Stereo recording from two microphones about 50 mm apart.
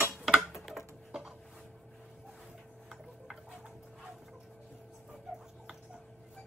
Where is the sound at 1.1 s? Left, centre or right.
Centre.